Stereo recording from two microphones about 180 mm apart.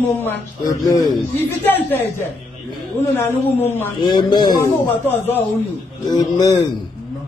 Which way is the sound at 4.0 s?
25° left (ahead or behind).